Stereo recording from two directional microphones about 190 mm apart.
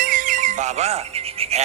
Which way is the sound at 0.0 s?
45° right (ahead or behind).